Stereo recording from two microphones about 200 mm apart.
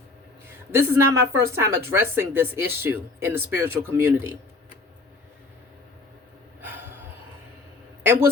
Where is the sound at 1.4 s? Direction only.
15° right (ahead or behind).